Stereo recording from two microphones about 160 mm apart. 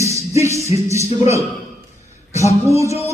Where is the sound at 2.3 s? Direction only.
20° right (ahead or behind).